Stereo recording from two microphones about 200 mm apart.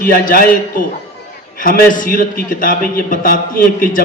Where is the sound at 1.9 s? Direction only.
45° left (ahead or behind).